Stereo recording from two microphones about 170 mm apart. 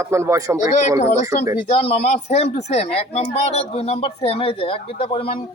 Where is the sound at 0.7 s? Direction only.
45° left (ahead or behind).